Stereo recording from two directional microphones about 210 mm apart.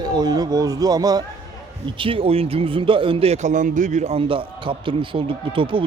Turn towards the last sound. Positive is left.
turn(degrees=-25)  # may be behind; listen again after turning